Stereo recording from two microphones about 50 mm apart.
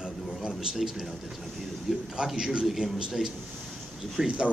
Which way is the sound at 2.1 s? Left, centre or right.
Centre.